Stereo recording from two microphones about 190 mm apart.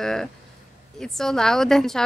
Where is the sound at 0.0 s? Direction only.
Centre (ahead or behind).